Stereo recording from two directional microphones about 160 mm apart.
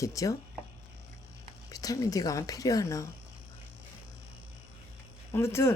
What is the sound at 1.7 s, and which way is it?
Speech, 20° left (ahead or behind).